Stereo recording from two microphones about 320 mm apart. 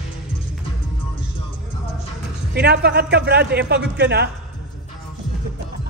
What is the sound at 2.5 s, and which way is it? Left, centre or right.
A man's voice, right.